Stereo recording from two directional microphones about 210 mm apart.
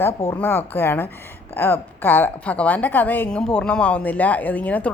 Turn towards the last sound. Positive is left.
turn(degrees=5)  # may be behind; listen again after turning